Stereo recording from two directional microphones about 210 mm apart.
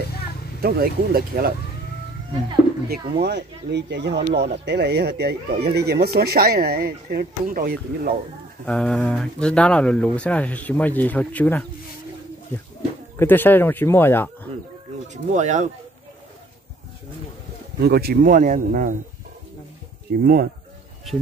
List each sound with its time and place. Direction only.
0.6 s speech: 45° right (ahead or behind)
3.2 s speech: 55° right (ahead or behind)
8.6 s speech: 5° left (ahead or behind)
13.2 s speech: 10° left (ahead or behind)
15.3 s speech: 35° right (ahead or behind)
17.7 s speech: 50° right (ahead or behind)
20.1 s speech: 45° right (ahead or behind)